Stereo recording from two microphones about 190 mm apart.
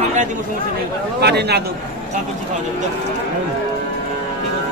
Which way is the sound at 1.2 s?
60° right (ahead or behind).